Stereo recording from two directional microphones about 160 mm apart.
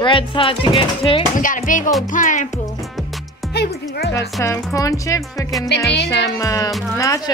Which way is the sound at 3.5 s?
90° left.